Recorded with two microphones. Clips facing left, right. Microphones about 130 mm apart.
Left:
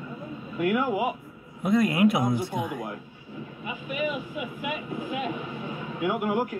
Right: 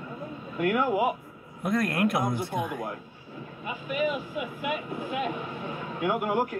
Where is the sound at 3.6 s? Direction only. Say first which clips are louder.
Right 2 dB; 45° right (ahead or behind).